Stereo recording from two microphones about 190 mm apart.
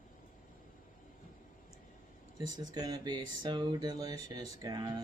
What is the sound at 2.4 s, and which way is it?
Speech, 20° right (ahead or behind).